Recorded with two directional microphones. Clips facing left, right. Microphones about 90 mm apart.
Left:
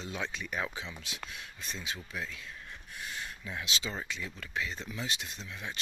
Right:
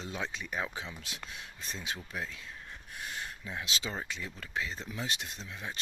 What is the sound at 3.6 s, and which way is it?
Speech, 40° right (ahead or behind).